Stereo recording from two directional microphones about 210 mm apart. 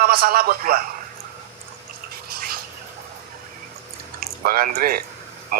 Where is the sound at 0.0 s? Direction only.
45° right (ahead or behind).